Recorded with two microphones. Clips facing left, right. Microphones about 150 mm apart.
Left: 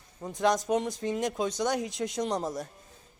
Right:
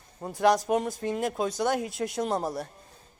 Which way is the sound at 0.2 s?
40° right (ahead or behind).